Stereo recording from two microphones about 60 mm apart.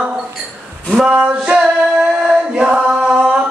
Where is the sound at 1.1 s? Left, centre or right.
Centre.